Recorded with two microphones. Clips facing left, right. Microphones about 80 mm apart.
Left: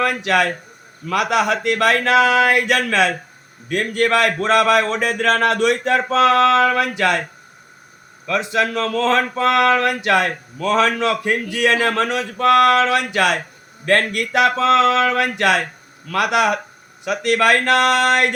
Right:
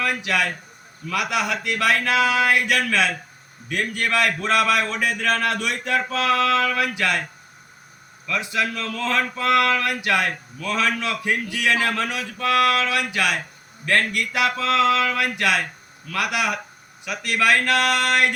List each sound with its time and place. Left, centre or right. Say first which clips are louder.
0.0 s speech: left 6 dB; left
8.3 s speech: left 6 dB; left
8.6 s a man's voice: left 8 dB; left
9.3 s speech: left 4 dB; left
10.6 s a man's voice: left 7 dB; left
11.1 s speech: left 4 dB; left